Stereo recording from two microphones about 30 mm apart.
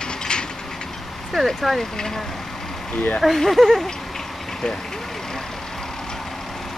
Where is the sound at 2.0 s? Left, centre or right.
Centre.